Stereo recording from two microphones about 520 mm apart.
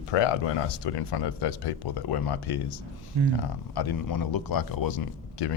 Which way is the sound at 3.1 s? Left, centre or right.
Right.